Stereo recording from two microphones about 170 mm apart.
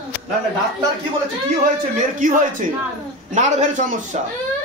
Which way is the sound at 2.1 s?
50° right (ahead or behind).